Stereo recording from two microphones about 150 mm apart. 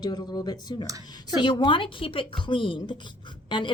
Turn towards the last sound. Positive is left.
turn(degrees=30)  # may be behind; listen again after turning